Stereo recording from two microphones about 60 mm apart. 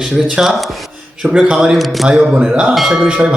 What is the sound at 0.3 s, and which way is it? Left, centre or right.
Speech, centre.